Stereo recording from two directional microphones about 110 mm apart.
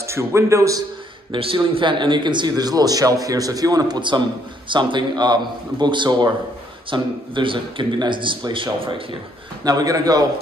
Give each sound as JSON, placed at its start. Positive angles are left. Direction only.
{"t": 0.0, "sound": "a man's voice", "side_deg": -25}
{"t": 1.3, "sound": "a man's voice", "side_deg": -50}
{"t": 9.7, "sound": "a man's voice", "side_deg": -35}